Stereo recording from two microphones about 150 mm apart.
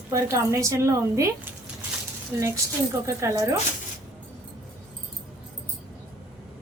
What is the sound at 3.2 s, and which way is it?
Speech, 20° right (ahead or behind).